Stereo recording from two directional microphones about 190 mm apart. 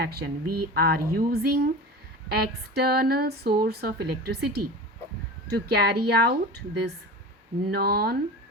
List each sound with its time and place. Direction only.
0.0 s speech: 55° right (ahead or behind)